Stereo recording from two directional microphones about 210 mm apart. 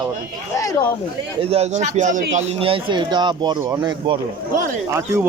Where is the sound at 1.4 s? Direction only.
30° right (ahead or behind).